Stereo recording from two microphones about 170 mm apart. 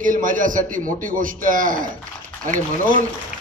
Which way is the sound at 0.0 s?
50° right (ahead or behind).